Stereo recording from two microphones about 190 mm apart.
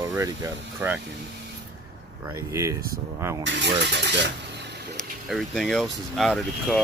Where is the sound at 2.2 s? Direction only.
15° right (ahead or behind).